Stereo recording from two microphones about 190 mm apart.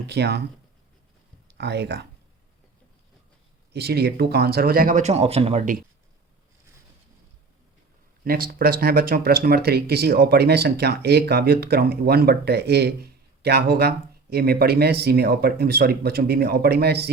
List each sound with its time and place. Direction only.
0.0 s speech: 60° right (ahead or behind)
1.5 s speech: 60° right (ahead or behind)
3.7 s speech: 60° right (ahead or behind); by 5.7 s 35° right (ahead or behind)
8.2 s speech: 50° right (ahead or behind)